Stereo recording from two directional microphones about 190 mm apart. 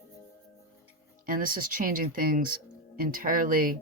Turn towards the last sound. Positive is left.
turn(degrees=-45)  # may be behind; listen again after turning